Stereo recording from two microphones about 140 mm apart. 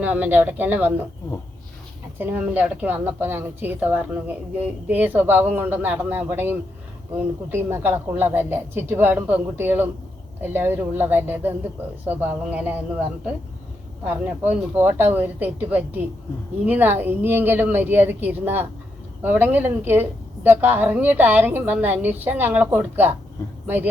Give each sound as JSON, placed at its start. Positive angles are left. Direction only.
{"t": 0.0, "sound": "a woman's voice", "side_deg": -10}
{"t": 2.1, "sound": "a woman's voice", "side_deg": -10}
{"t": 14.0, "sound": "a woman's voice", "side_deg": -15}